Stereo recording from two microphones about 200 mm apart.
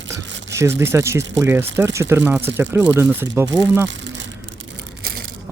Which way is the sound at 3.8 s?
65° right (ahead or behind).